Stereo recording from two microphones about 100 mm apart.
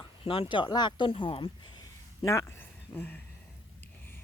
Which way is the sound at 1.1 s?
65° left (ahead or behind).